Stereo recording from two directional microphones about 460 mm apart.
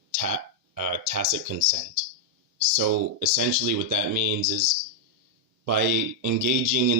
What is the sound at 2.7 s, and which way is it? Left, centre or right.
Speech, right.